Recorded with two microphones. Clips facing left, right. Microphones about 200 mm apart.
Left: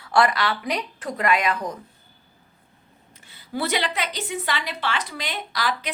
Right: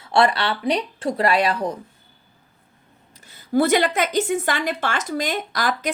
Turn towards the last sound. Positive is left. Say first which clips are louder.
# right 4 dB
turn(degrees=-45)  # may be behind; listen again after turning